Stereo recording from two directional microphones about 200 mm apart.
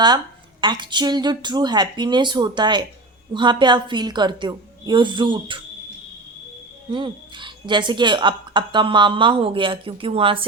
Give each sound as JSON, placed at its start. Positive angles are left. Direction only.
{"t": 0.6, "sound": "a woman's voice", "side_deg": -25}
{"t": 6.9, "sound": "a woman's voice", "side_deg": -25}